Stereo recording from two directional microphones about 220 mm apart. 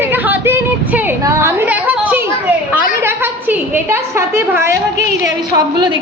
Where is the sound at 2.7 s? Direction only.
10° right (ahead or behind).